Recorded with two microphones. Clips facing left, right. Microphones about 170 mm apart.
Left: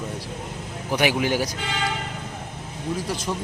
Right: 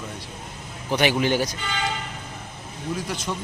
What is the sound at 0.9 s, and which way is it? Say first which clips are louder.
Speech: right 1 dB; 5° left (ahead or behind).